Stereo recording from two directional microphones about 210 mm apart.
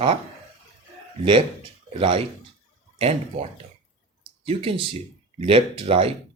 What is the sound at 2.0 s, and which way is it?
Speech, 25° right (ahead or behind).